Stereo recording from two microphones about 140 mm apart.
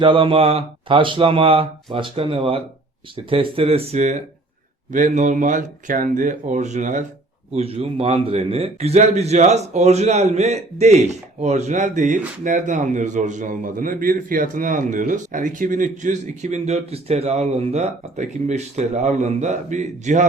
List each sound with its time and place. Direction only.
0.0 s a man's voice: 40° right (ahead or behind); by 7.0 s 60° right (ahead or behind)
7.5 s a man's voice: 45° right (ahead or behind)